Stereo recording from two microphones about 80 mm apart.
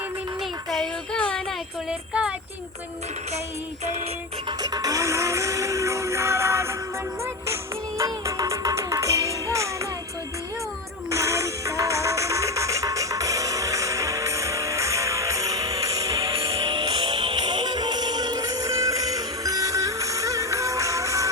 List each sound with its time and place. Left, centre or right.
1.1 s child singing: centre
1.9 s speech: centre
4.6 s music: right
11.1 s music: right
16.2 s music: right